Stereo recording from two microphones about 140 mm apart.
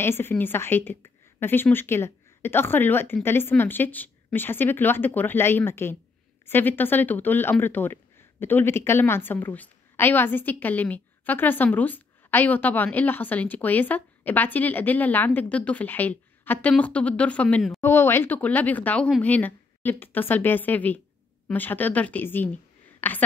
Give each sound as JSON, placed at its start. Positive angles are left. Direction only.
{"t": 0.0, "sound": "speech", "side_deg": 15}
{"t": 17.8, "sound": "speech", "side_deg": 20}
{"t": 22.9, "sound": "a sound", "side_deg": 15}